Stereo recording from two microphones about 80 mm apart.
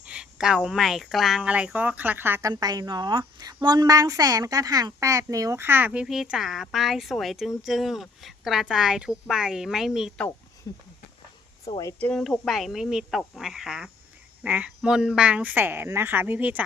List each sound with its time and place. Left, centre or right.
0.0 s a woman's voice: centre
1.4 s speech: centre
2.4 s a woman's voice: right
3.4 s a woman's voice: right
5.6 s speech: right; by 10.1 s centre
10.7 s speech: left
12.1 s speech: centre
14.4 s speech: centre
14.8 s a woman's voice: centre